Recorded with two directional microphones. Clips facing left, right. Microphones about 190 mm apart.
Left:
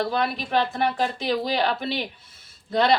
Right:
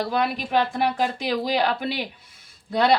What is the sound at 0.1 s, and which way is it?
Speech, 10° right (ahead or behind).